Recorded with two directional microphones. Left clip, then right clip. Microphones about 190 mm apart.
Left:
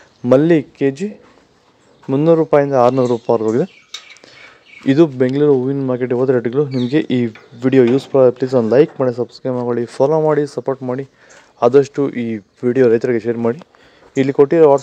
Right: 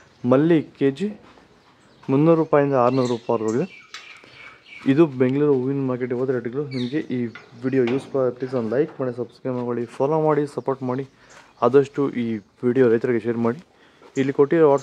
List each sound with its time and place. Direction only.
0.2 s speech: 20° left (ahead or behind)
4.8 s speech: 15° left (ahead or behind)